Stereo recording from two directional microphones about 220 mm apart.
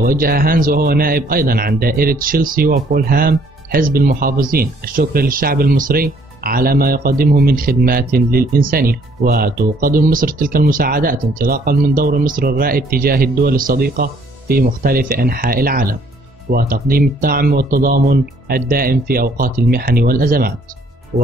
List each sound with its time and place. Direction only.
0.0 s a man's voice: 40° right (ahead or behind)